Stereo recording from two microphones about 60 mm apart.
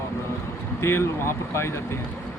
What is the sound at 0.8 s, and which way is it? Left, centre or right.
Speech, left.